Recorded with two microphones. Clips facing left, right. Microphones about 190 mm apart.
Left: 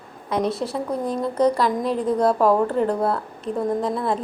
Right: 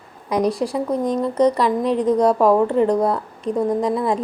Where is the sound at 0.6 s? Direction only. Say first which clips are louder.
Right 4 dB; 5° right (ahead or behind).